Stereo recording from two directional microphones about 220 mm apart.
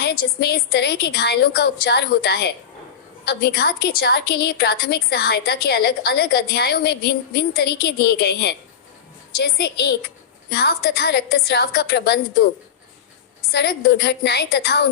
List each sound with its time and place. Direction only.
0.0 s a woman's voice: 45° left (ahead or behind)
13.5 s a woman's voice: 50° left (ahead or behind)